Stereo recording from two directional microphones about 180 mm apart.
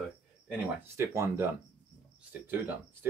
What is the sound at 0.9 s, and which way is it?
Speech, 15° right (ahead or behind).